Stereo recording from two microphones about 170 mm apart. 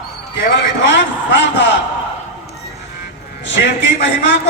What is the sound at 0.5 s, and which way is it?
A man's voice, 90° left.